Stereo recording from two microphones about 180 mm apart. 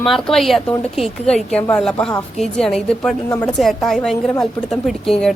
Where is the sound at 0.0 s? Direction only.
Centre (ahead or behind).